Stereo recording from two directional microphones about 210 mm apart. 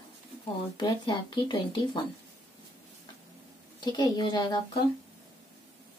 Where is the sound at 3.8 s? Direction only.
20° left (ahead or behind).